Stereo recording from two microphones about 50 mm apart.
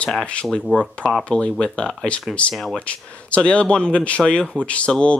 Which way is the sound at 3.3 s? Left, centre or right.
Left.